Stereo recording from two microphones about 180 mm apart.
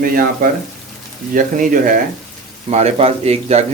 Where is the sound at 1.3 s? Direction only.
45° right (ahead or behind).